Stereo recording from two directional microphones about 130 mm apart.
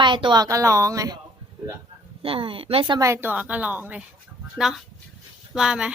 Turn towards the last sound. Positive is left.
turn(degrees=-5)  # may be behind; listen again after turning